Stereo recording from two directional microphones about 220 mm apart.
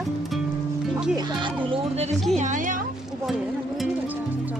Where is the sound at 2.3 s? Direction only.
35° right (ahead or behind).